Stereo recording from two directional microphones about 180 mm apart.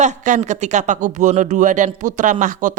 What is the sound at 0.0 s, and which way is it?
Speech, 40° right (ahead or behind).